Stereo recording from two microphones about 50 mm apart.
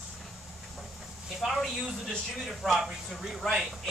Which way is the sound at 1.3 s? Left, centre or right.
Centre.